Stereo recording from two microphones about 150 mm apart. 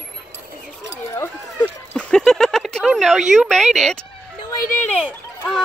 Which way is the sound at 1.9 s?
5° left (ahead or behind).